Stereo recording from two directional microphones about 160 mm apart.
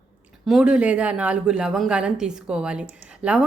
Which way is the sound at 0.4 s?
5° right (ahead or behind).